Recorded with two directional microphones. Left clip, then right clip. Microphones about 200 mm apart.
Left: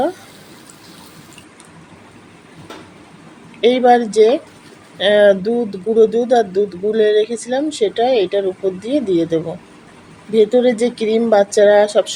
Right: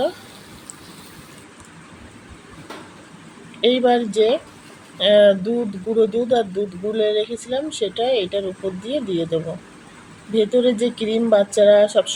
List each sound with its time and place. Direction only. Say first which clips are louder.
3.6 s a woman's voice: left 5 dB; 15° left (ahead or behind)